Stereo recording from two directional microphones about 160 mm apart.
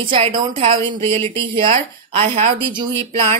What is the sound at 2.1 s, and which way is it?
Speech, 35° right (ahead or behind).